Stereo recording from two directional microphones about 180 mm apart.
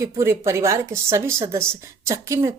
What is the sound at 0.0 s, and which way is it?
A woman's voice, 15° right (ahead or behind).